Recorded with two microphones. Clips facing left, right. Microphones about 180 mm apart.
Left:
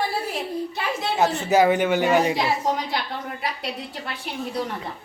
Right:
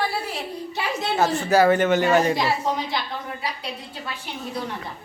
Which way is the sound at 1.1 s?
20° left (ahead or behind).